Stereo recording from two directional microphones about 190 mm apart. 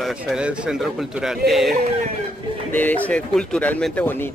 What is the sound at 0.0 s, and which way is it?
Speech, 5° right (ahead or behind).